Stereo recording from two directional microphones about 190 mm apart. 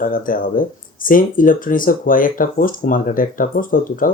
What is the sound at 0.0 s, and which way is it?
Speech, 45° left (ahead or behind).